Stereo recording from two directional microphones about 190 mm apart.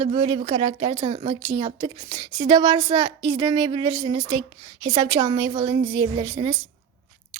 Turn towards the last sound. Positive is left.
turn(degrees=-25)  # may be behind; listen again after turning